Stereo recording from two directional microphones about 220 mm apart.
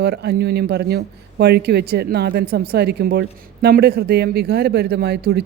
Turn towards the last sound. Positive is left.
turn(degrees=-45)  # may be behind; listen again after turning